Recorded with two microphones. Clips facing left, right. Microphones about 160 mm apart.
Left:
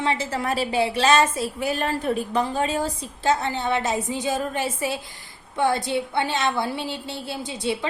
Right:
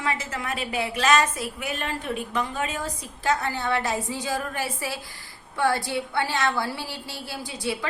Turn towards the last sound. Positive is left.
turn(degrees=20)  # may be behind; listen again after turning